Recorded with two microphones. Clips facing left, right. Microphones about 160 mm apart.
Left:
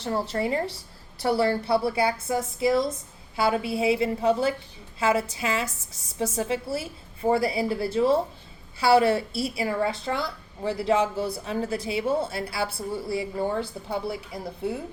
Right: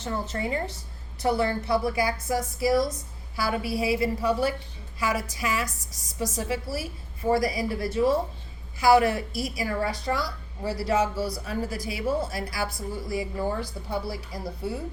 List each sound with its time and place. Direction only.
0.0 s a woman's voice: 30° left (ahead or behind)